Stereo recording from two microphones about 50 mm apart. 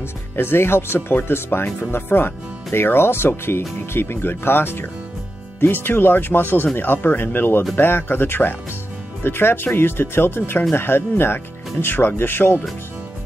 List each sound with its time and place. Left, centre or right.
0.4 s speech: left